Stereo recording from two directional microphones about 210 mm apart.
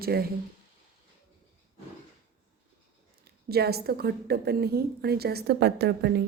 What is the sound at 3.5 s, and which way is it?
A woman's voice, 50° right (ahead or behind).